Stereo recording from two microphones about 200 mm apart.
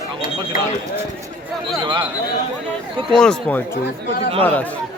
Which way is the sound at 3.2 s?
5° left (ahead or behind).